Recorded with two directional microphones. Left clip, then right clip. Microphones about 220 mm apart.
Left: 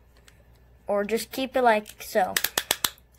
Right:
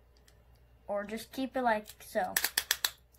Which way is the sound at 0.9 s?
40° left (ahead or behind).